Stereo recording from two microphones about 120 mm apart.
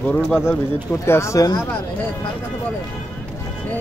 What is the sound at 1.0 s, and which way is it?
Speech, 20° left (ahead or behind).